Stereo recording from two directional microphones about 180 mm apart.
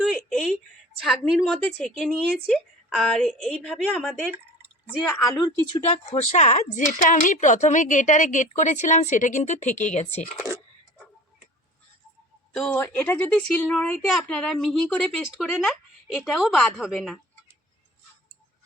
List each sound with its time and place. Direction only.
0.0 s a sound: centre (ahead or behind)
1.0 s a woman's voice: centre (ahead or behind)
5.0 s a woman's voice: 15° left (ahead or behind)
5.7 s speech: 35° left (ahead or behind)
12.5 s a woman's voice: 10° left (ahead or behind)